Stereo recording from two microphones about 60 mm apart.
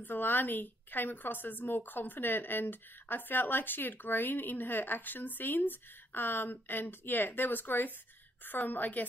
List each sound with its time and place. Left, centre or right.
0.0 s a woman's voice: left